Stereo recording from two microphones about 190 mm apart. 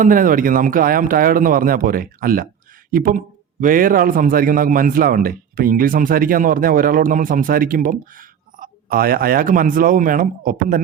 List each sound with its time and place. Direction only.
0.0 s a man's voice: 45° right (ahead or behind)